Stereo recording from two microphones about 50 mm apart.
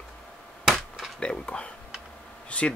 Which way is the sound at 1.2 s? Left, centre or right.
Centre.